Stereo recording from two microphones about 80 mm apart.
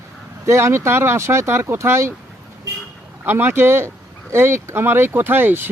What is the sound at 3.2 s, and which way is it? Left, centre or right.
A man's voice, right.